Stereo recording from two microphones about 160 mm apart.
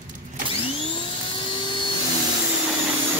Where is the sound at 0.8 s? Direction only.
35° left (ahead or behind).